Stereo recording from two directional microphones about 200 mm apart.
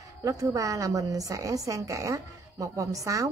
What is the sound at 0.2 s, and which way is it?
A woman's voice, 15° right (ahead or behind).